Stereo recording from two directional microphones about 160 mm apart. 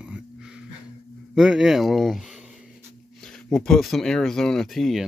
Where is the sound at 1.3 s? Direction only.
5° right (ahead or behind).